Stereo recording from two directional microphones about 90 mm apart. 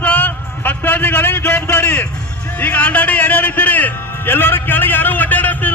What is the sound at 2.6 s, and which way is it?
A man's voice, 15° left (ahead or behind).